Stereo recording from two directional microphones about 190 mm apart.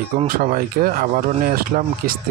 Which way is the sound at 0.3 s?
45° right (ahead or behind).